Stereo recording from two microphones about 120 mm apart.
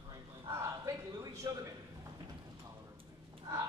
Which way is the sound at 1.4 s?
25° right (ahead or behind).